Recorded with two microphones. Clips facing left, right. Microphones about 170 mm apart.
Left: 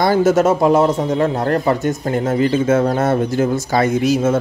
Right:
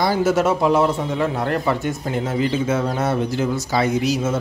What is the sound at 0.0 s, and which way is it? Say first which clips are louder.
Speech: left 4 dB; 50° left (ahead or behind).